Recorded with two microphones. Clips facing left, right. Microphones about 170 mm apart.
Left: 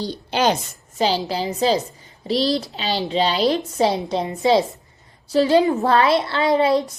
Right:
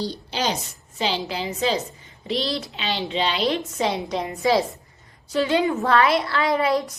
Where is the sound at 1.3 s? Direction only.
35° left (ahead or behind).